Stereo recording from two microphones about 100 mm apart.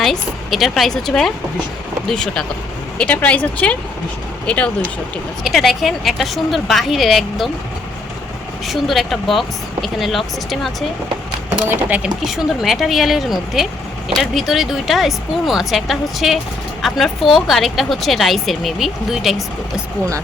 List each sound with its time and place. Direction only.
0.0 s speech: centre (ahead or behind)
5.4 s speech: centre (ahead or behind)
8.6 s speech: centre (ahead or behind)
11.7 s speech: 15° right (ahead or behind)
12.0 s speech: 5° right (ahead or behind)